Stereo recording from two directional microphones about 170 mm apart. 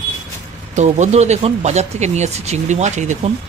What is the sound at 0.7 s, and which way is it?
Speech, 45° right (ahead or behind).